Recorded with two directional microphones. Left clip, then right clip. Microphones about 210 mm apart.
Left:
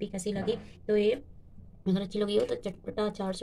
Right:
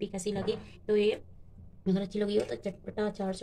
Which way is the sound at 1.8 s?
10° left (ahead or behind).